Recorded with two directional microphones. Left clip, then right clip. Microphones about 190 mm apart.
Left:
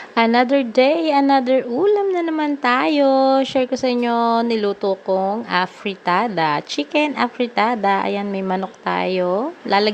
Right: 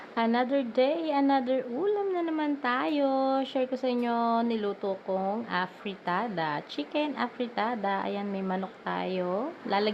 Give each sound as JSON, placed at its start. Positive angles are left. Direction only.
{"t": 0.2, "sound": "a woman's voice", "side_deg": 40}